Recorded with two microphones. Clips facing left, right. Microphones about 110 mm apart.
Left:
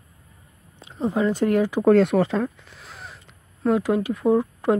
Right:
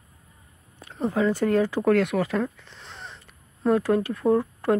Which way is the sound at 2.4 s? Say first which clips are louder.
Left 2 dB; 10° left (ahead or behind).